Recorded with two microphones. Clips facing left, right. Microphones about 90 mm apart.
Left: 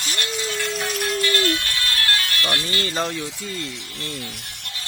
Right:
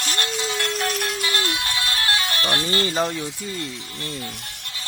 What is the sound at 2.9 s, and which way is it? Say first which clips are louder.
Speech: right 2 dB; 20° right (ahead or behind).